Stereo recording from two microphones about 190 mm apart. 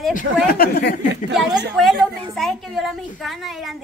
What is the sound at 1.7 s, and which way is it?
A woman's voice, centre (ahead or behind).